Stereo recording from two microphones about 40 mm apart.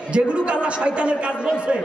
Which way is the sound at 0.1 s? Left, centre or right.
Right.